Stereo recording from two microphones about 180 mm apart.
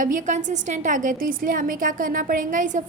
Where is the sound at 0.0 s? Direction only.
45° right (ahead or behind).